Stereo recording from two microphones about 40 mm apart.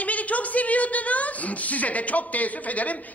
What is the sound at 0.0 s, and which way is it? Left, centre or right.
A woman's voice, left.